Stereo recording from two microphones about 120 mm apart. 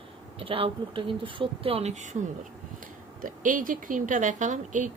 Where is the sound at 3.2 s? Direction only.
90° right.